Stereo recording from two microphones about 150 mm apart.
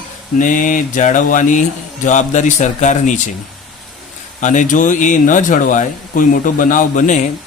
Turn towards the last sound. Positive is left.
turn(degrees=55)  # may be behind; listen again after turning